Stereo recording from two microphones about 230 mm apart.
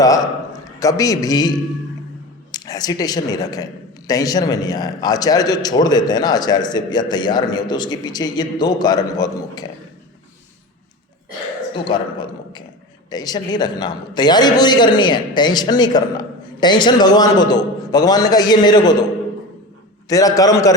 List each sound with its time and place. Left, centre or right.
0.0 s a man's voice: centre
11.7 s a man's voice: centre
20.1 s a man's voice: centre